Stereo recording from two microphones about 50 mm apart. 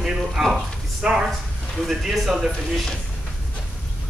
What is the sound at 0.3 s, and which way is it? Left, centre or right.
Speech, centre.